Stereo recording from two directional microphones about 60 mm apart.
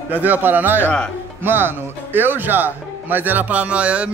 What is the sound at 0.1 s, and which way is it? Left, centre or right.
Speech, right.